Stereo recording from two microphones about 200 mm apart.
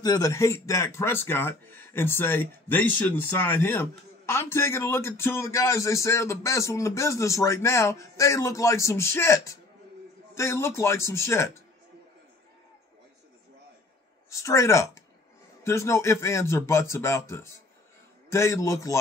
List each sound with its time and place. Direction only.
0.0 s speech: 20° left (ahead or behind)
14.3 s speech: 15° left (ahead or behind)